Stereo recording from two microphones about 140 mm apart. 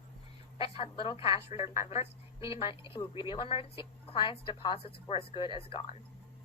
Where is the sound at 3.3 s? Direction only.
40° left (ahead or behind).